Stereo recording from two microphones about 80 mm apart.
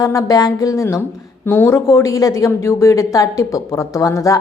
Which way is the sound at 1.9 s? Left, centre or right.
Left.